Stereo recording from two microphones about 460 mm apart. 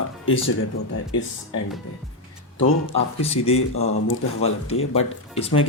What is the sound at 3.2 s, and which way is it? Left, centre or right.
Speech, centre.